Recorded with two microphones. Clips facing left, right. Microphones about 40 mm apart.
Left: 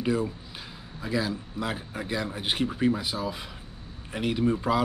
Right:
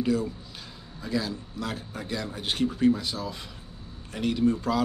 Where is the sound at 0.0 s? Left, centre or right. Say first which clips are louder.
Right 1 dB; centre.